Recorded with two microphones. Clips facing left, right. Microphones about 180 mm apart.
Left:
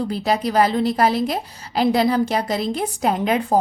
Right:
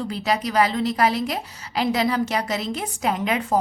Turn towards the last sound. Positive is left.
turn(degrees=35)  # may be behind; listen again after turning